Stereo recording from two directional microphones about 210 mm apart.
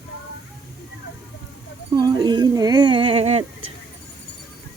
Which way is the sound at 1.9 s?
20° right (ahead or behind).